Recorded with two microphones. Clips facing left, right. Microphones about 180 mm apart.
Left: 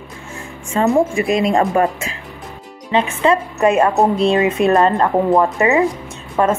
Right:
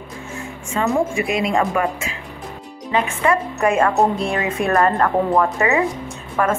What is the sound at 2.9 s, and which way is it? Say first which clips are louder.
Speech: left 3 dB; 25° left (ahead or behind).